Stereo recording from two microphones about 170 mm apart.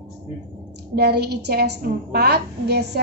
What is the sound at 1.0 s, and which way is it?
A woman's voice, 70° right (ahead or behind).